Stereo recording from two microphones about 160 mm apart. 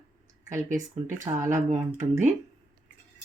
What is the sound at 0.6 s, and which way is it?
Speech, 50° right (ahead or behind).